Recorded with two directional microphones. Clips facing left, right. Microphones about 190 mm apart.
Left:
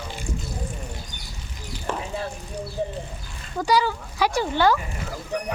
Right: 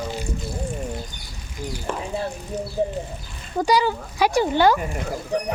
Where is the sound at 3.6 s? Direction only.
20° right (ahead or behind).